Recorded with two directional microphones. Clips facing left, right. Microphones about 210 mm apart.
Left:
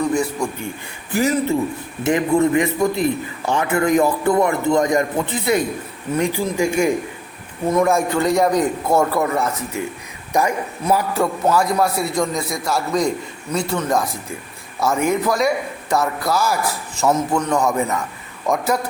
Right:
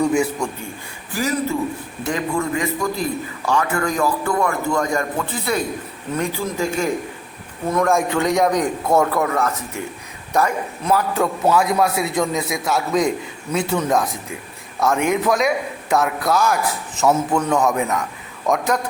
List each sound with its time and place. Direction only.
0.0 s a man's voice: 10° right (ahead or behind)
1.1 s a man's voice: 25° left (ahead or behind)
11.1 s a man's voice: centre (ahead or behind)